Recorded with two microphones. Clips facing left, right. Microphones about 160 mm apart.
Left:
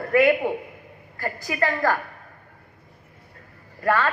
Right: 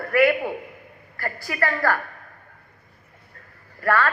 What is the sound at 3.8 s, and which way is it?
Speech, 20° left (ahead or behind).